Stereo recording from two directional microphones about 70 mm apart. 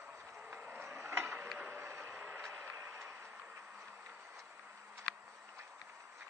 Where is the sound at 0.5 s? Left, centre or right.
Right.